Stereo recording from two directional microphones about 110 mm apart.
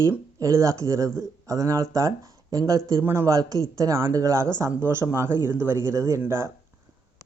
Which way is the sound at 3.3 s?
35° right (ahead or behind).